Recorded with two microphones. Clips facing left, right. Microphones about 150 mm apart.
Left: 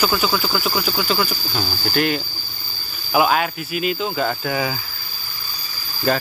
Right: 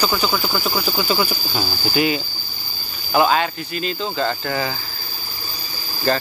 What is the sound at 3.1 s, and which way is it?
Cricket, 5° left (ahead or behind).